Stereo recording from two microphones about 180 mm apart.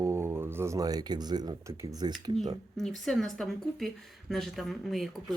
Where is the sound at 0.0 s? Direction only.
15° right (ahead or behind).